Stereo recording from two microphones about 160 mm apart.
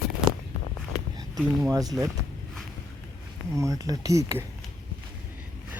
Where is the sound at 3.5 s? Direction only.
20° right (ahead or behind).